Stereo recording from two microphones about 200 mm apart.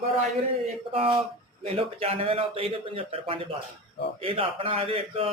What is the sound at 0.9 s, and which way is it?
A man's voice, 30° right (ahead or behind).